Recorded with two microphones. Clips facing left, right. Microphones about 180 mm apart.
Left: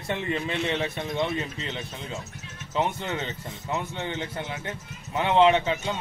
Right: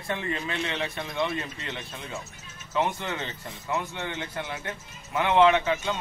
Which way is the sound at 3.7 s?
20° left (ahead or behind).